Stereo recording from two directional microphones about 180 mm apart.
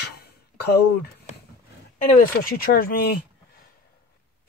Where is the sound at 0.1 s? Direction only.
60° left (ahead or behind).